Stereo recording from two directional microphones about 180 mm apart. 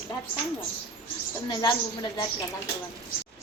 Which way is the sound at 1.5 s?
25° left (ahead or behind).